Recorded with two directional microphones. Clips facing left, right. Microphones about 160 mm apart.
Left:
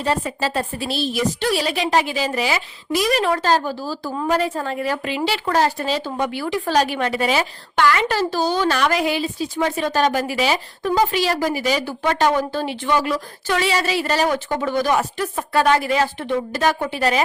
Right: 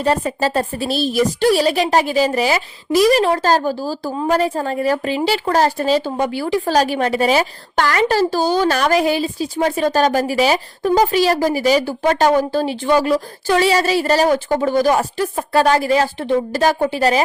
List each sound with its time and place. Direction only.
0.0 s a woman's voice: 45° right (ahead or behind)